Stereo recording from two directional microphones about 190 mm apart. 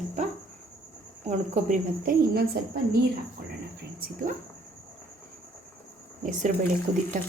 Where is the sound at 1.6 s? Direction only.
50° right (ahead or behind).